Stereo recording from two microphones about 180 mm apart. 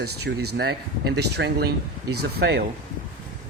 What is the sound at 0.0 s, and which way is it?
Speech, 70° right (ahead or behind).